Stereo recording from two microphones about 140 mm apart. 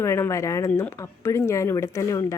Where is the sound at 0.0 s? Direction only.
20° left (ahead or behind).